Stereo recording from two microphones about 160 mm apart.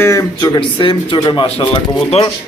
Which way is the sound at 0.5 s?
30° left (ahead or behind).